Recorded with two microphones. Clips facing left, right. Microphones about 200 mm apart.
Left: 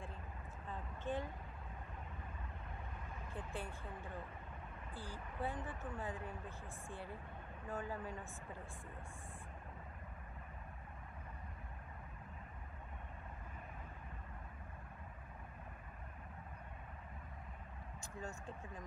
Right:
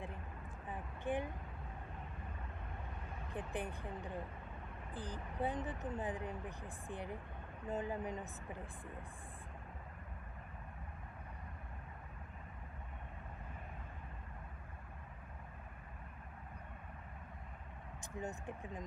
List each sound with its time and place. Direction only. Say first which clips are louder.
0.7 s a sound: right 3 dB; 15° right (ahead or behind)
3.3 s speech: right 5 dB; 20° right (ahead or behind)
18.2 s speech: right 4 dB; 20° right (ahead or behind)